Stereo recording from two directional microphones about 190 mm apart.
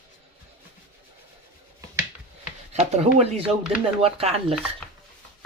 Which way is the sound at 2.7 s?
35° right (ahead or behind).